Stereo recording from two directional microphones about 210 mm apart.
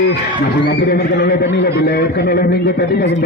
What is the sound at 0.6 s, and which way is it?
A man's voice, 50° left (ahead or behind).